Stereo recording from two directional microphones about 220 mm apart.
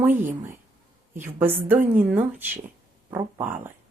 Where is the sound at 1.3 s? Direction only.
10° right (ahead or behind).